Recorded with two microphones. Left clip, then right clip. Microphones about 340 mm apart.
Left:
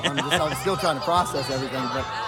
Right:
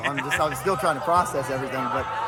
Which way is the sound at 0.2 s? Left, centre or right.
Centre.